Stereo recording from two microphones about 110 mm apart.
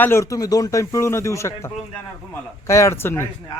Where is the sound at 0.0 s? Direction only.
25° left (ahead or behind).